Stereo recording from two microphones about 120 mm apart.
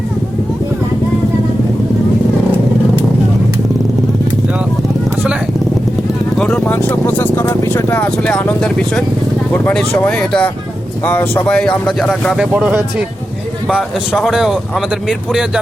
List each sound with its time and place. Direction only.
6.3 s vehicle: 5° left (ahead or behind)
6.7 s vehicle: 20° left (ahead or behind)
8.1 s speech: 10° left (ahead or behind)
10.2 s speech: 5° left (ahead or behind)
11.0 s speech: 20° left (ahead or behind)
11.5 s speech: 5° left (ahead or behind)
12.5 s speech: 10° right (ahead or behind)